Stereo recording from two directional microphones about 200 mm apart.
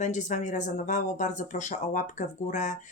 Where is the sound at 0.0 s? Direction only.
35° left (ahead or behind).